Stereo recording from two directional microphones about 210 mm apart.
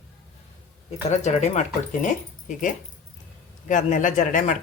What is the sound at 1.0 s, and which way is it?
A woman's voice, 30° left (ahead or behind).